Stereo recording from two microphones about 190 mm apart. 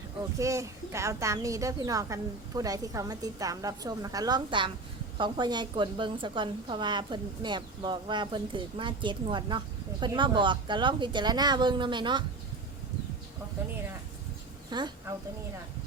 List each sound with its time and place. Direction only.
0.3 s a woman's voice: 15° right (ahead or behind)
14.7 s a woman's voice: 25° right (ahead or behind)